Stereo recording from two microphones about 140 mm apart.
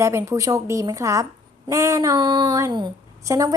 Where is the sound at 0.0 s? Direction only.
20° right (ahead or behind).